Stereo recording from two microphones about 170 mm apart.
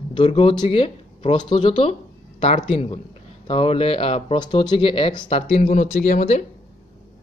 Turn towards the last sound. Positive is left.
turn(degrees=45)  # may be behind; listen again after turning